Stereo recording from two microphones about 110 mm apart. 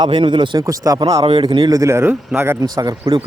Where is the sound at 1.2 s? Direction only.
50° right (ahead or behind).